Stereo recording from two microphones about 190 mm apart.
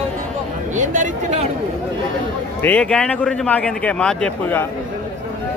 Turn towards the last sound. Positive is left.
turn(degrees=10)  # may be behind; listen again after turning